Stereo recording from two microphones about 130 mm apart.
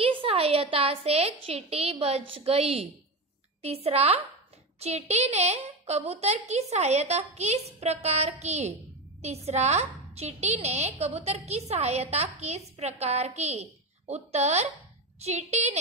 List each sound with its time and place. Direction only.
0.0 s a woman's voice: 45° right (ahead or behind); by 15.8 s 60° right (ahead or behind)